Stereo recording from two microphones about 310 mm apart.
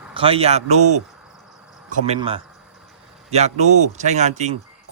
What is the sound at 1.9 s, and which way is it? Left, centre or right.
Speech, centre.